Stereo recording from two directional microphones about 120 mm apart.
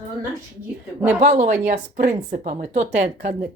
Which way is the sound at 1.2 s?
90° right.